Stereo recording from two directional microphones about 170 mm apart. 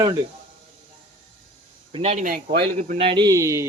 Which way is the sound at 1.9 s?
35° right (ahead or behind).